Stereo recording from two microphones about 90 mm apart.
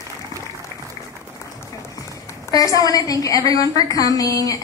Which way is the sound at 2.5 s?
40° left (ahead or behind).